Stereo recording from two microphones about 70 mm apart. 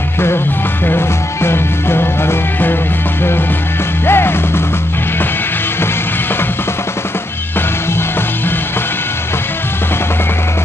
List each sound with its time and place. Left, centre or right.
0.8 s music: left
4.0 s music: left